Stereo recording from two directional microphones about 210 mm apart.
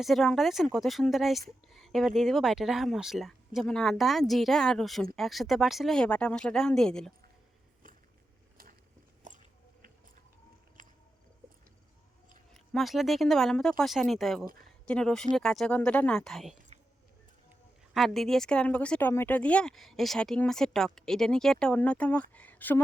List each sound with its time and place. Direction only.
0.0 s speech: centre (ahead or behind)
10.8 s a sound: 40° right (ahead or behind)
12.5 s speech: centre (ahead or behind)
17.9 s speech: centre (ahead or behind)